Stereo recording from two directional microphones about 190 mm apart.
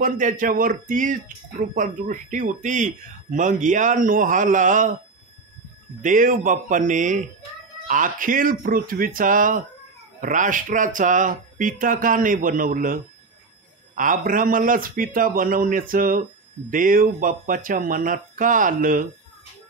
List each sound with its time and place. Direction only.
0.0 s speech: 45° right (ahead or behind)
6.0 s speech: 45° right (ahead or behind)